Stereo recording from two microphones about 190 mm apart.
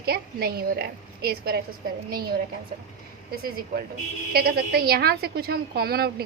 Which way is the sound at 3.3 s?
50° right (ahead or behind).